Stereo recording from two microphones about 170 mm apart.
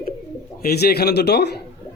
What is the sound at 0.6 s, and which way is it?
A man's voice, 60° left (ahead or behind).